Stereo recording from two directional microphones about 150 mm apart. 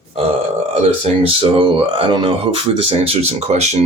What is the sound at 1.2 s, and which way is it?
Speech, 35° right (ahead or behind).